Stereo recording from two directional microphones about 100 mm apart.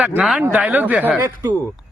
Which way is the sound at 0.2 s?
10° right (ahead or behind).